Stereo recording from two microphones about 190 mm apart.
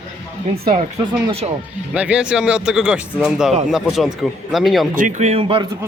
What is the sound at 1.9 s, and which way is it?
Speech, 5° right (ahead or behind).